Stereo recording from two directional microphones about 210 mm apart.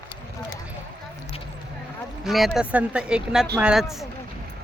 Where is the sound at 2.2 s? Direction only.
Centre (ahead or behind).